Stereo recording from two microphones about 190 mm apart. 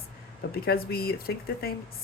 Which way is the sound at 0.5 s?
55° left (ahead or behind).